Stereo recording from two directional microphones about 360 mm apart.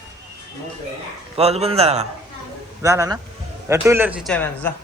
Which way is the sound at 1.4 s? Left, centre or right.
Centre.